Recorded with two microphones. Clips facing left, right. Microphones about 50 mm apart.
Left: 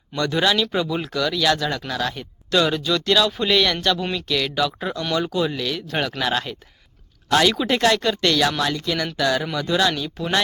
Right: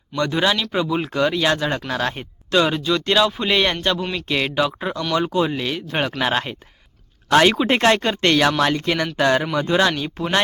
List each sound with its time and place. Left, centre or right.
0.2 s speech: centre; by 2.2 s right
2.5 s speech: centre
4.8 s speech: centre
5.1 s speech: right